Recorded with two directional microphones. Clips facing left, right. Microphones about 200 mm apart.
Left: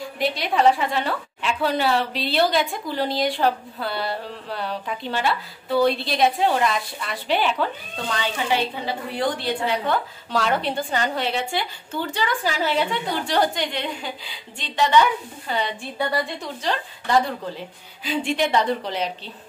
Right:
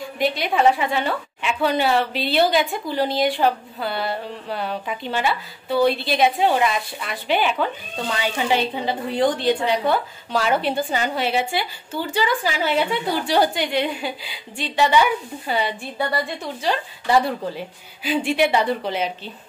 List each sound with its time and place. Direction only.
0.2 s a woman's voice: centre (ahead or behind)
8.5 s a woman's voice: 20° right (ahead or behind)
10.3 s a woman's voice: 5° right (ahead or behind)